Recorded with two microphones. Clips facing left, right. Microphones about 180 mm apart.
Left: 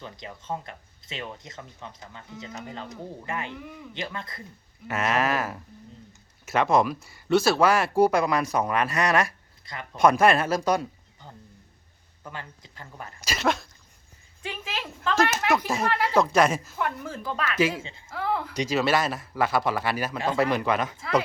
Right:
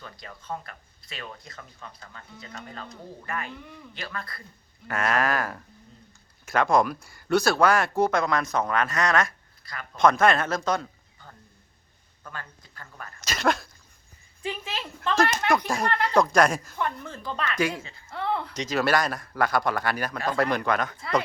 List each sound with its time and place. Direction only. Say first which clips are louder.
0.0 s speech: left 4 dB; 20° left (ahead or behind)
4.9 s speech: even; 5° left (ahead or behind)
10.7 s a sound: left 3 dB; 15° left (ahead or behind)
12.2 s speech: left 2 dB; 15° left (ahead or behind)
13.2 s speech: right 1 dB; 5° left (ahead or behind)